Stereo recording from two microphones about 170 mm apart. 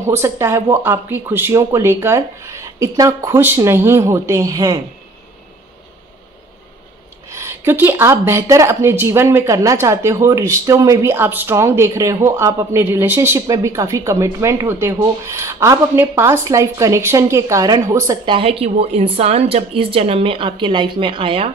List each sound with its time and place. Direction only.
0.0 s speech: 15° right (ahead or behind)
7.2 s speech: 15° right (ahead or behind)
18.3 s speech: 35° right (ahead or behind)